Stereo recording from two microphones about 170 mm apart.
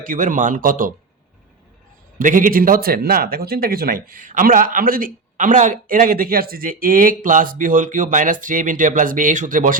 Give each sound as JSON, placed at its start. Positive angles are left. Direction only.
{"t": 0.0, "sound": "speech", "side_deg": -50}
{"t": 2.1, "sound": "speech", "side_deg": -50}